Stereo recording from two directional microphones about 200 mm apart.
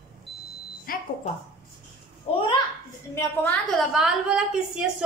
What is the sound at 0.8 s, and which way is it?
Speech, 45° left (ahead or behind).